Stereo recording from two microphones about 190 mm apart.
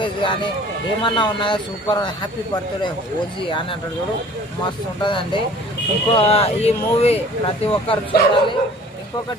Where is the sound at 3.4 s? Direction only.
25° left (ahead or behind).